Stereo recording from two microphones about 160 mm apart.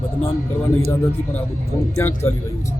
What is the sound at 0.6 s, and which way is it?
A man's voice, 15° left (ahead or behind).